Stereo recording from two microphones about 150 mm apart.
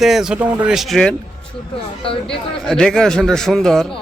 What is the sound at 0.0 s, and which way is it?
Speech, 5° right (ahead or behind).